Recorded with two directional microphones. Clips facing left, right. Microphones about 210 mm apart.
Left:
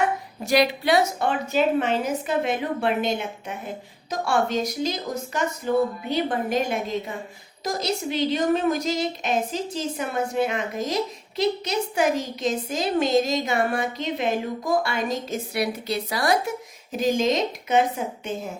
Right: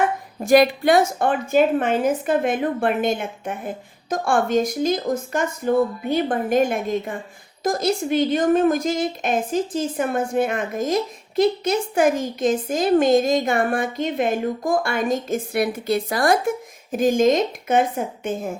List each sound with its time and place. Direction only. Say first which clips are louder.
0.4 s a woman's voice: right 6 dB; 50° right (ahead or behind)